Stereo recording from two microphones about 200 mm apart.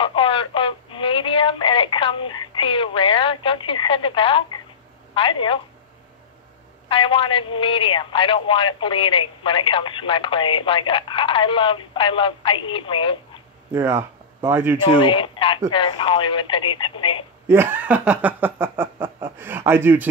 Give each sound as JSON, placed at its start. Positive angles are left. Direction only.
{"t": 0.0, "sound": "telephone", "side_deg": 25}
{"t": 5.1, "sound": "speech", "side_deg": 25}
{"t": 6.9, "sound": "speech", "side_deg": 25}
{"t": 13.7, "sound": "speech", "side_deg": -15}
{"t": 14.8, "sound": "speech", "side_deg": 25}
{"t": 17.5, "sound": "a sound", "side_deg": -10}
{"t": 19.0, "sound": "chuckle", "side_deg": -25}
{"t": 19.3, "sound": "a sound", "side_deg": -10}